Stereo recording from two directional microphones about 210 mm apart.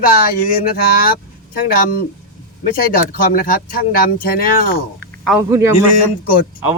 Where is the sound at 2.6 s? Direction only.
45° left (ahead or behind).